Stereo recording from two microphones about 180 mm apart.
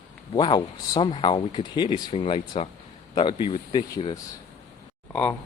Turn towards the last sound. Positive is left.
turn(degrees=5)  # may be behind; listen again after turning